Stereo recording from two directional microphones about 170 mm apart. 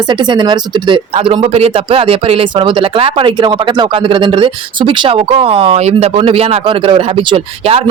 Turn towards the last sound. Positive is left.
turn(degrees=-35)  # may be behind; listen again after turning